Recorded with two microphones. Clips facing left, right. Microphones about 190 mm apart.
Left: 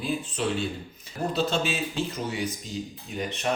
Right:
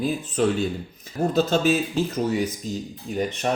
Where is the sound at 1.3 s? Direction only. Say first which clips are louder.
Right 7 dB; 40° right (ahead or behind).